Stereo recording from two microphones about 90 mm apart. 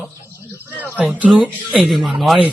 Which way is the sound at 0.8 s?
20° left (ahead or behind).